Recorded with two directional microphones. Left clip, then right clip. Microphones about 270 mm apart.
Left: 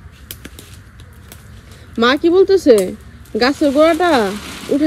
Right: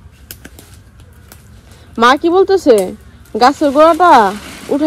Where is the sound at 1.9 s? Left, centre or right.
Centre.